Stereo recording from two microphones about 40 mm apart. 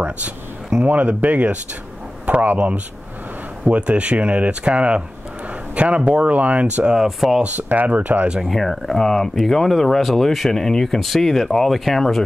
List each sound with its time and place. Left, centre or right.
0.8 s a man's voice: right
6.3 s speech: right
7.1 s speech: centre
7.5 s speech: right
8.5 s speech: centre